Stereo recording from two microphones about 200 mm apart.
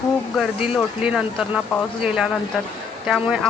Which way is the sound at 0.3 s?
5° right (ahead or behind).